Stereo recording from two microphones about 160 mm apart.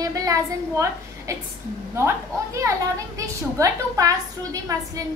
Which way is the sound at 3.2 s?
20° right (ahead or behind).